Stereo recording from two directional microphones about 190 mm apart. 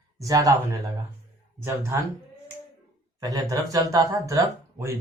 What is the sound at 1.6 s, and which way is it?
Speech, 15° right (ahead or behind).